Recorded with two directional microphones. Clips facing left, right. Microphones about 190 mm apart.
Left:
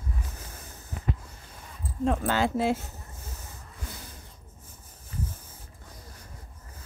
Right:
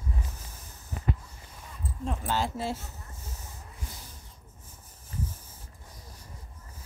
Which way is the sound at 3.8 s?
60° left (ahead or behind).